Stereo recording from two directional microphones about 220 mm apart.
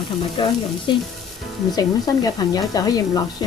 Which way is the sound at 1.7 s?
15° left (ahead or behind).